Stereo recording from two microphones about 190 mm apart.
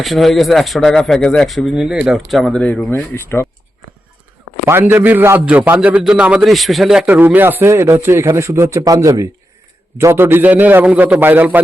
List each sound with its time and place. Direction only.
0.0 s speech: centre (ahead or behind)
3.2 s speech: 15° left (ahead or behind)
4.7 s a man's voice: 10° right (ahead or behind)